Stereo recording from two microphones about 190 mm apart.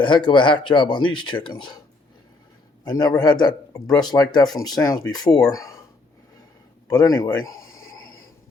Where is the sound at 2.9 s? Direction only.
20° left (ahead or behind).